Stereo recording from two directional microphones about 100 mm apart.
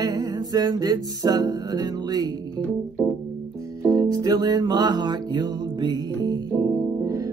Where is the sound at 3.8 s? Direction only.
35° right (ahead or behind).